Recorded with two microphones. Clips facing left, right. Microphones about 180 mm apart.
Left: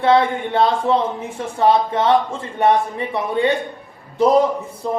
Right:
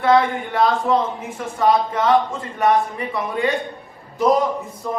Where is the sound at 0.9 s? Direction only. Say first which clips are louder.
Left 1 dB; 25° left (ahead or behind).